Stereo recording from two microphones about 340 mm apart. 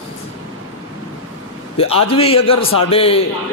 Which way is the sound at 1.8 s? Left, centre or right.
Centre.